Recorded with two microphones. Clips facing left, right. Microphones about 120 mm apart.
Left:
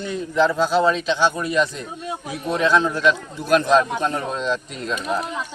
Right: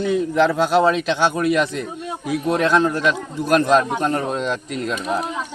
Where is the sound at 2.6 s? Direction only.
55° right (ahead or behind).